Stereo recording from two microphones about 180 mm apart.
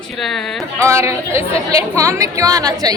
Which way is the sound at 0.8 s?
15° right (ahead or behind).